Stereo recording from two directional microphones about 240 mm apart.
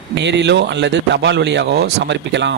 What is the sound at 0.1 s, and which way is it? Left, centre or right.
Speech, right.